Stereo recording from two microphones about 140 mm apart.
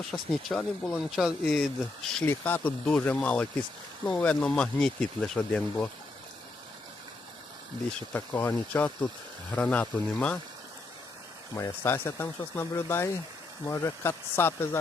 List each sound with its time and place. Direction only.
0.1 s speech: 5° left (ahead or behind)
7.9 s speech: 10° left (ahead or behind)
11.5 s speech: 20° left (ahead or behind)